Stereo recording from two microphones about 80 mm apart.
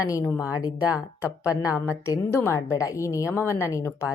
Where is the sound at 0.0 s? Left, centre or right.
Left.